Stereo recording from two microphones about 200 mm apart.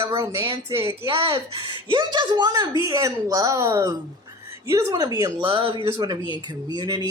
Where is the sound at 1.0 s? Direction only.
25° right (ahead or behind).